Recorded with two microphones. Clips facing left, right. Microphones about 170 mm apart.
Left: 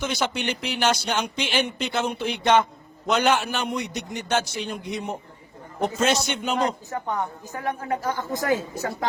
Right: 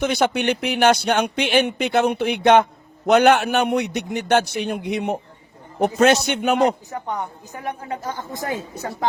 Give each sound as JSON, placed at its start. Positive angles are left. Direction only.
{"t": 0.0, "sound": "speech", "side_deg": -60}
{"t": 6.9, "sound": "a woman's voice", "side_deg": -20}